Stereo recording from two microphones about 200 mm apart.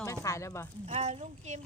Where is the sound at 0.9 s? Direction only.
35° right (ahead or behind).